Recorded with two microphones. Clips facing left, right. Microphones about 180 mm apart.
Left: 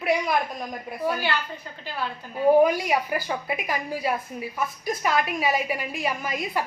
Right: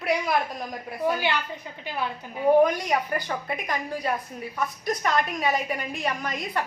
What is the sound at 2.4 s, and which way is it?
A woman's voice, 5° left (ahead or behind).